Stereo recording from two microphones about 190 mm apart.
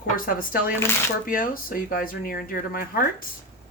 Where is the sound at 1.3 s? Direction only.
45° left (ahead or behind).